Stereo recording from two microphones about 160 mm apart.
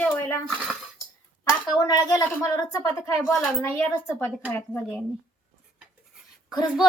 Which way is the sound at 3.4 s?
10° left (ahead or behind).